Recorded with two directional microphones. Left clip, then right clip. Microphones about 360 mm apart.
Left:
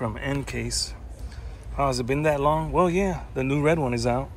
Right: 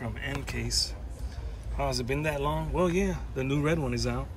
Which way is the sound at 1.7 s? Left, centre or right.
Centre.